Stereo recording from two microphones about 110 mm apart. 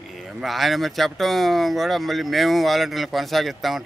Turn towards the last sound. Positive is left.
turn(degrees=0)  # may be behind; listen again after turning